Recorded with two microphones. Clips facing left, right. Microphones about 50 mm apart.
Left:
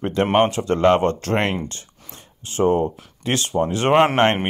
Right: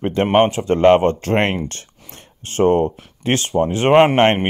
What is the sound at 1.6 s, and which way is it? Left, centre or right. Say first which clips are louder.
Speech: right 3 dB; right.